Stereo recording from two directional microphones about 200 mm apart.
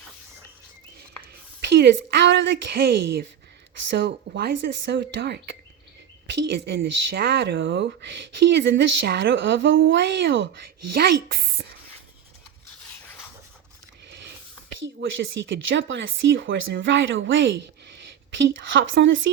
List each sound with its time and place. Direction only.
1.2 s speech: 60° right (ahead or behind)
15.0 s speech: 65° right (ahead or behind)